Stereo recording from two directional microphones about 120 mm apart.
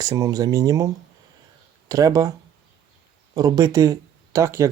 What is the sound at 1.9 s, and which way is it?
Speech, 30° right (ahead or behind).